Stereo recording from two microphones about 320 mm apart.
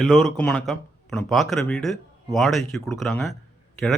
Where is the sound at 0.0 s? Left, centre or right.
Centre.